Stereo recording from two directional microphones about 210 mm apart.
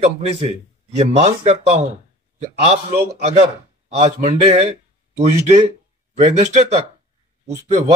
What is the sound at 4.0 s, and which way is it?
Speech, 30° right (ahead or behind).